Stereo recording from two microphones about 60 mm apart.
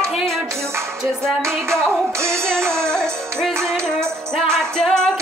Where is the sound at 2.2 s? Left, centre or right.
Centre.